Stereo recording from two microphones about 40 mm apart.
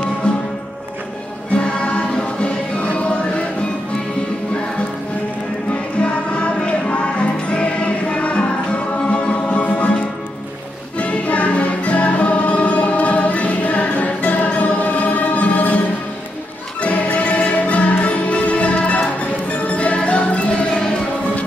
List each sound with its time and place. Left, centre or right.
1.5 s music: left
5.9 s music: left
11.0 s music: left
16.8 s music: left